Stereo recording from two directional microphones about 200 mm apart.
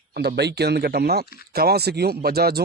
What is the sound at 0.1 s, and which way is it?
Speech, 55° right (ahead or behind).